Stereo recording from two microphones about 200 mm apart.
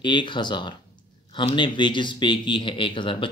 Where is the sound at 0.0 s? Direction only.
25° left (ahead or behind).